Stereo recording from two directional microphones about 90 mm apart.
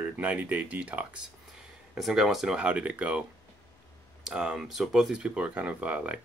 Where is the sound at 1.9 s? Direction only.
5° right (ahead or behind).